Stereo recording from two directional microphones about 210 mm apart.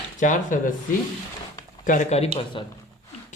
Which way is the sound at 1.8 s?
35° left (ahead or behind).